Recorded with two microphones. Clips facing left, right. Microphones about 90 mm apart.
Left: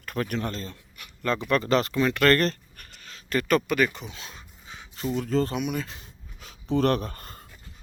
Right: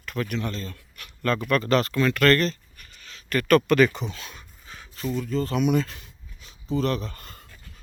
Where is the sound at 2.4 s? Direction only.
50° left (ahead or behind).